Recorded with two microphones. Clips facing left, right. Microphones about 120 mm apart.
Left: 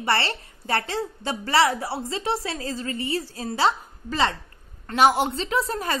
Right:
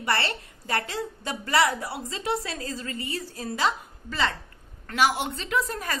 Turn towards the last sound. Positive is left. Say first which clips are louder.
# left 3 dB
turn(degrees=30)  # may be behind; listen again after turning